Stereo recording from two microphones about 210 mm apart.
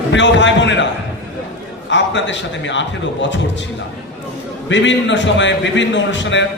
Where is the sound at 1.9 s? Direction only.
60° left (ahead or behind).